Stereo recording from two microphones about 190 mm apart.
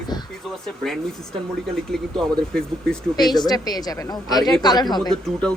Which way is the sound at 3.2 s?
20° left (ahead or behind).